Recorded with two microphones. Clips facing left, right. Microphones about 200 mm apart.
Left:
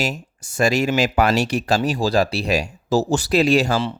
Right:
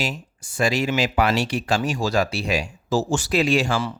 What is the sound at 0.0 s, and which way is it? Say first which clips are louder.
Speech: left 3 dB; 45° left (ahead or behind).